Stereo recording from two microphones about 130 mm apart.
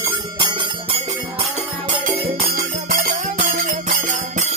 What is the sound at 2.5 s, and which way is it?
Music, 90° right.